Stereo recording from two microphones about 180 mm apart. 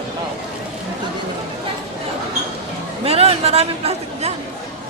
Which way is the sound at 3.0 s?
35° right (ahead or behind).